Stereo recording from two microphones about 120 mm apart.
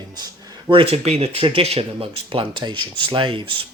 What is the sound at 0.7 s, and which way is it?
Speech, 45° right (ahead or behind).